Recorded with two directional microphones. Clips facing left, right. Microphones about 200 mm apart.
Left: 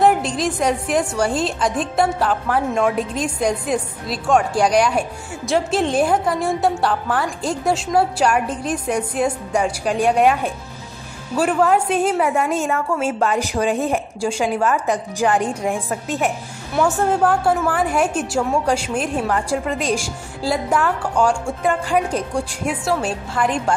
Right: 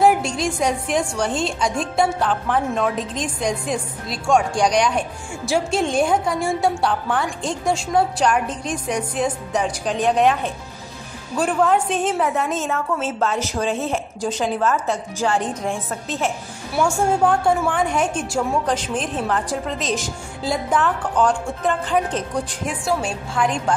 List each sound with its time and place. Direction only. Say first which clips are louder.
0.0 s a woman's voice: left 1 dB; centre (ahead or behind)
16.8 s a woman's voice: left 1 dB; 5° left (ahead or behind)